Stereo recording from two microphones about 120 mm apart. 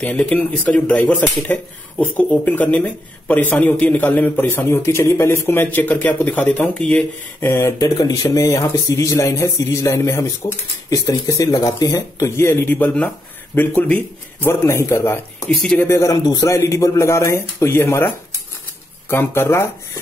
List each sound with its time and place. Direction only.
0.0 s speech: 10° left (ahead or behind)
7.3 s speech: 20° left (ahead or behind)
7.8 s speech: 30° left (ahead or behind); by 14.5 s 15° left (ahead or behind)
14.5 s speech: 25° left (ahead or behind)
15.6 s speech: 5° left (ahead or behind)
15.9 s speech: 30° left (ahead or behind)
19.0 s speech: 20° left (ahead or behind)